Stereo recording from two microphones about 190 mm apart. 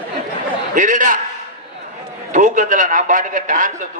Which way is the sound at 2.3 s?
40° right (ahead or behind).